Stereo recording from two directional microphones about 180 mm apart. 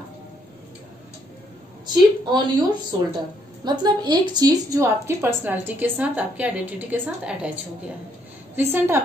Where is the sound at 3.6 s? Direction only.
25° right (ahead or behind); by 7.5 s 5° right (ahead or behind).